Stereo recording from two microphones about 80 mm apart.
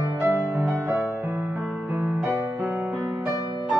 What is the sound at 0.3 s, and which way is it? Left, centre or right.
Music, right.